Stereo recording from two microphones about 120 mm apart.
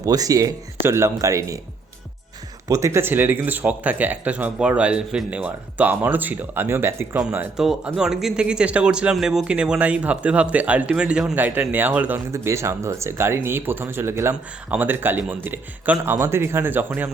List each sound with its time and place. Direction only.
0.0 s speech: 30° right (ahead or behind)
2.6 s speech: 25° right (ahead or behind)